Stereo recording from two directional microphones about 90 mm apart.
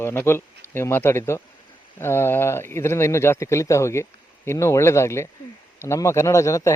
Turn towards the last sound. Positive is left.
turn(degrees=35)  # may be behind; listen again after turning